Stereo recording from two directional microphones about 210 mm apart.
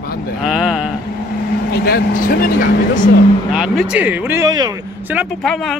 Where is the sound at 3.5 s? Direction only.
Centre (ahead or behind); by 4.7 s 15° right (ahead or behind).